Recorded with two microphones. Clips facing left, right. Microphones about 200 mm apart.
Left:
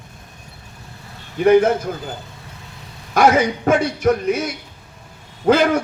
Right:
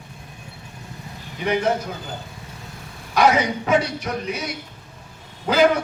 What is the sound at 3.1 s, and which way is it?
A man's voice, 50° left (ahead or behind).